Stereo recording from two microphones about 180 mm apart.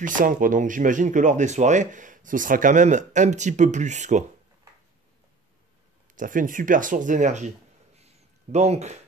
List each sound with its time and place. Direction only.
0.0 s speech: 50° right (ahead or behind)
6.1 s speech: 45° right (ahead or behind)